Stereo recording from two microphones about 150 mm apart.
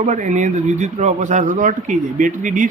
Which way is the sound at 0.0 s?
55° right (ahead or behind).